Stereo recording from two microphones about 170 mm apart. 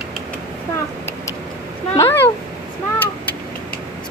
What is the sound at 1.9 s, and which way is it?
Speech, 15° left (ahead or behind).